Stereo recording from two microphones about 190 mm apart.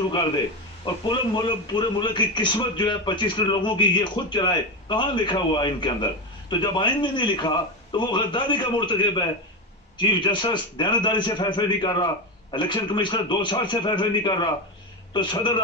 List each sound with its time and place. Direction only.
0.8 s a man's voice: 25° left (ahead or behind)